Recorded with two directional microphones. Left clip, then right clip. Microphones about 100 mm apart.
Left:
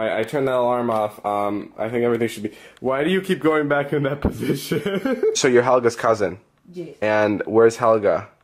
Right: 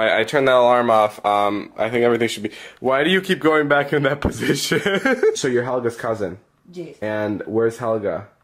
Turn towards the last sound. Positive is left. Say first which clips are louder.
# left 5 dB
turn(degrees=10)  # may be behind; listen again after turning